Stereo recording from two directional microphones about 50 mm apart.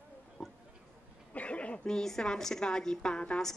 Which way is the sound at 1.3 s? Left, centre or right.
Left.